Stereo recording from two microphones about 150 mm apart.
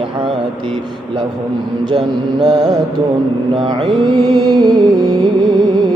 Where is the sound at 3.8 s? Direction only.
30° right (ahead or behind).